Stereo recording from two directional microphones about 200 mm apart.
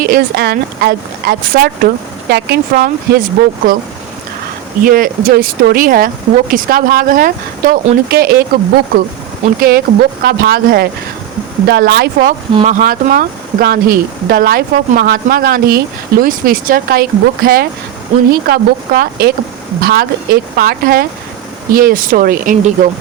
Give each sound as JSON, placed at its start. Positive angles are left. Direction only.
{"t": 0.0, "sound": "speech", "side_deg": -50}
{"t": 4.8, "sound": "speech", "side_deg": -45}